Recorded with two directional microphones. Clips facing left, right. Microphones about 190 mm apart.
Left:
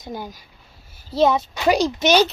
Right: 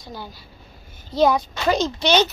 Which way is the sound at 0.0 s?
20° left (ahead or behind).